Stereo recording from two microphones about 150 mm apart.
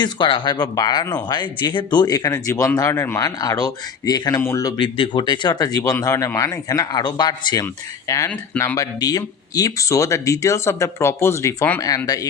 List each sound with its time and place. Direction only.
0.0 s speech: 35° left (ahead or behind)